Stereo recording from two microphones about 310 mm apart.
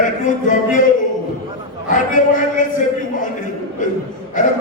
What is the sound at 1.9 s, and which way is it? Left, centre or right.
A man's voice, left.